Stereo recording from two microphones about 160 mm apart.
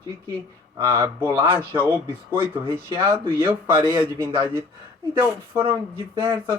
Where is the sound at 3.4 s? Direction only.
30° right (ahead or behind).